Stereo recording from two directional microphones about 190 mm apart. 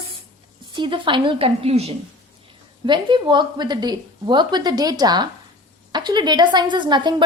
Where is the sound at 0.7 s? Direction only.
25° right (ahead or behind).